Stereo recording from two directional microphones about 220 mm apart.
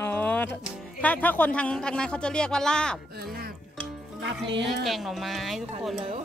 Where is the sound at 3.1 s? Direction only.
45° right (ahead or behind).